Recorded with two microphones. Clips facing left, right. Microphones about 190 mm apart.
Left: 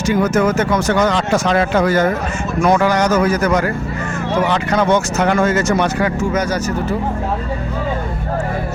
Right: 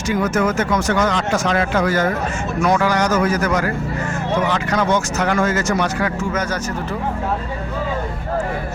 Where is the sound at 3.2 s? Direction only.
35° left (ahead or behind); by 7.0 s 10° left (ahead or behind).